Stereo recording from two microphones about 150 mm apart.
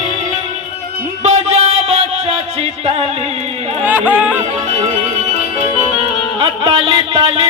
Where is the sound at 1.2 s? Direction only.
45° right (ahead or behind).